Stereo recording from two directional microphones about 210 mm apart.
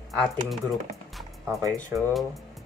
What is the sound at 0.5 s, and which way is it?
Speech, centre (ahead or behind).